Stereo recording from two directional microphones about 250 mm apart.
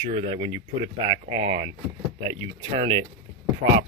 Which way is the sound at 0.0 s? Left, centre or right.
Centre.